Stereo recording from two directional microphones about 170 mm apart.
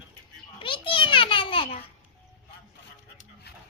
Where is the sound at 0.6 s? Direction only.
30° left (ahead or behind).